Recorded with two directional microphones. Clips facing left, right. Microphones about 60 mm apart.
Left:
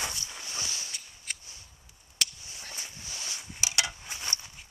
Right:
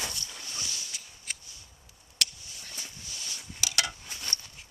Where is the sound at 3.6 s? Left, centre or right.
Centre.